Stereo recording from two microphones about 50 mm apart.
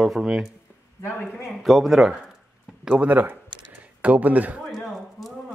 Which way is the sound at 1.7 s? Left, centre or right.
Centre.